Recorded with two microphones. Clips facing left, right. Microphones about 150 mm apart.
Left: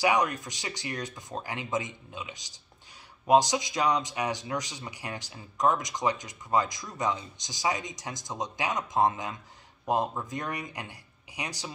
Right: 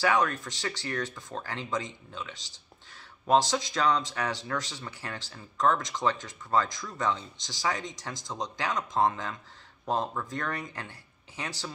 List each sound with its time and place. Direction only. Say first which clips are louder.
0.0 s speech: even; 15° left (ahead or behind)